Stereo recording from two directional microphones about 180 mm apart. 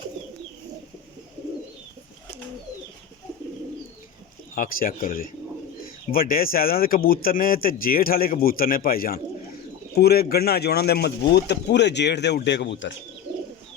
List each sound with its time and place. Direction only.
4.5 s speech: 50° left (ahead or behind); by 12.9 s 75° left (ahead or behind)